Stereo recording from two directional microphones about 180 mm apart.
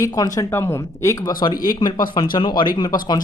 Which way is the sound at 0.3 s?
15° left (ahead or behind).